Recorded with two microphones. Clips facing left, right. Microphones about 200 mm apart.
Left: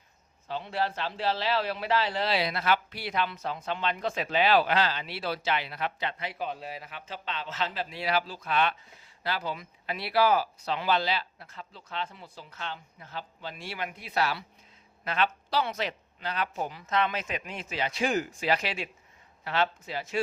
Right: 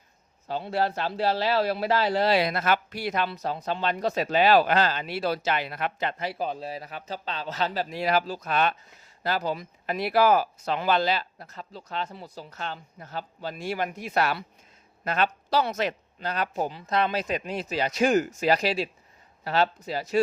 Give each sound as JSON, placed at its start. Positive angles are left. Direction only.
{"t": 0.4, "sound": "a man's voice", "side_deg": -40}